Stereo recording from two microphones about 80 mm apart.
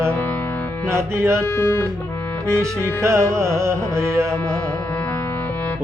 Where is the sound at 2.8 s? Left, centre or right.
Right.